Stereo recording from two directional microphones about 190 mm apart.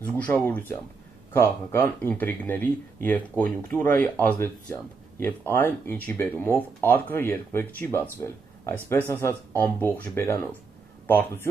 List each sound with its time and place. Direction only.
0.1 s speech: 10° left (ahead or behind)